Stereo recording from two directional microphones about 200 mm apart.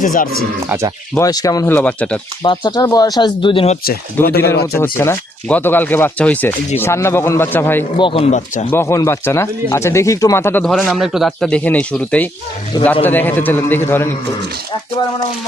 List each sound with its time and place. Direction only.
0.0 s speech: 40° left (ahead or behind)
1.1 s speech: 15° left (ahead or behind)
2.4 s speech: 20° left (ahead or behind)
3.8 s speech: 50° left (ahead or behind)
4.8 s speech: 10° left (ahead or behind)
7.9 s speech: 25° left (ahead or behind)
8.7 s speech: 15° left (ahead or behind)